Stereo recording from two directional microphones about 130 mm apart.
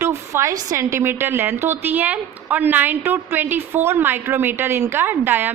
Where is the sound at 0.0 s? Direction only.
20° right (ahead or behind).